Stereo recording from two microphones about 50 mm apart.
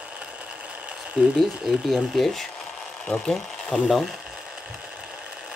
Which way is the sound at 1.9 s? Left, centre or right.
Centre.